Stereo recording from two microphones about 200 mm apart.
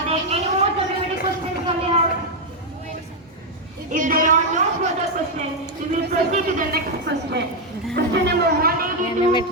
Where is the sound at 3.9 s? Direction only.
40° right (ahead or behind).